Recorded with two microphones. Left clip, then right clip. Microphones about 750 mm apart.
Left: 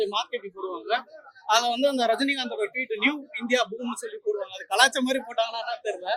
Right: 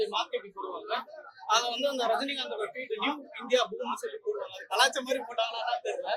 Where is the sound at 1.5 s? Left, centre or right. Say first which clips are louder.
Left 5 dB; left.